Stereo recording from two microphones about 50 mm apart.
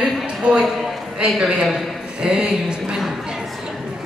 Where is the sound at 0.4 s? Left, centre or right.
Centre.